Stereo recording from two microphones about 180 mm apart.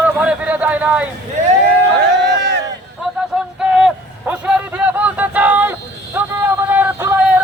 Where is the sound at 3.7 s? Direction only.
5° right (ahead or behind).